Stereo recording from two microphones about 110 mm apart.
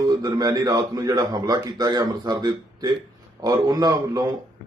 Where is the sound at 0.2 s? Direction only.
35° right (ahead or behind).